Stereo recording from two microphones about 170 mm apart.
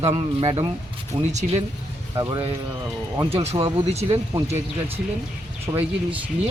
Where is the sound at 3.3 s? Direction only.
35° right (ahead or behind).